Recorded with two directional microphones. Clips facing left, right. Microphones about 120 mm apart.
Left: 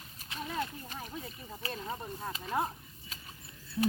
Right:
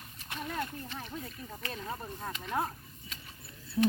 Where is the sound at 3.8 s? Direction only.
30° right (ahead or behind).